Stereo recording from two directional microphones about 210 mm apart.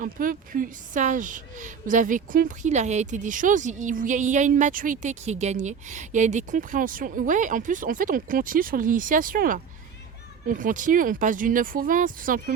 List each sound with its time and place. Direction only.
0.0 s a woman's voice: 40° right (ahead or behind)